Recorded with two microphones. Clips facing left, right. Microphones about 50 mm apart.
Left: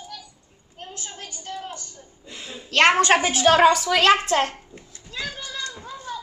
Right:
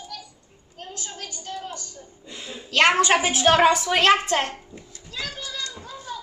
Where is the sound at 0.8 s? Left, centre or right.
Left.